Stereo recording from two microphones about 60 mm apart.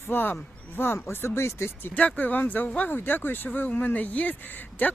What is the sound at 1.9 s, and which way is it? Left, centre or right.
Speech, left.